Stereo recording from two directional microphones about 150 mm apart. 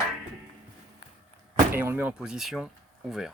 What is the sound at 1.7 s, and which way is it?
Speech, 10° right (ahead or behind).